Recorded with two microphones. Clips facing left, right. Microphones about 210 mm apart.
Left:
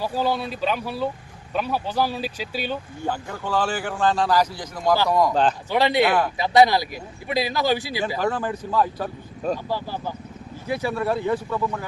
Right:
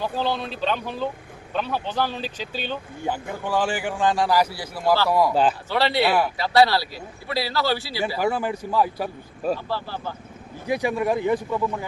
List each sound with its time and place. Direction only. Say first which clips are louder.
0.0 s a man's voice: left 2 dB; 10° left (ahead or behind)
3.1 s a man's voice: right 1 dB; 15° right (ahead or behind)
5.7 s a man's voice: left 4 dB; 15° left (ahead or behind)
6.1 s a man's voice: even; 10° right (ahead or behind)
6.3 s a man's voice: left 2 dB; 20° left (ahead or behind)
8.2 s a man's voice: right 3 dB; 10° right (ahead or behind)
9.6 s a man's voice: left 2 dB; 15° left (ahead or behind)
10.7 s a man's voice: right 2 dB; 15° right (ahead or behind)